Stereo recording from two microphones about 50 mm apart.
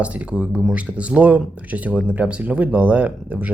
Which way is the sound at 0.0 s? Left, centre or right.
Right.